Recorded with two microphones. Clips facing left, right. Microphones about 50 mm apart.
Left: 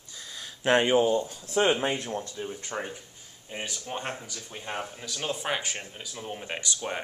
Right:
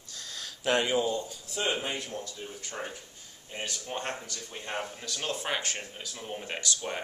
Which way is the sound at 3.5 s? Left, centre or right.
Centre.